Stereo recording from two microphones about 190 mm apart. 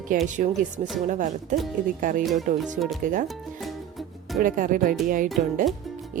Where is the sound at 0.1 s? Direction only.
45° right (ahead or behind).